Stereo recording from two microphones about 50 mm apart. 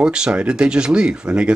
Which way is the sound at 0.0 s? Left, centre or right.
Centre.